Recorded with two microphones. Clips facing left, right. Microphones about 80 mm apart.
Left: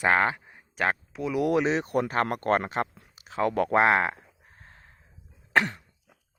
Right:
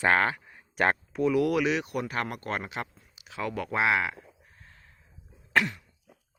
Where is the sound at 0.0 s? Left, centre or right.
Centre.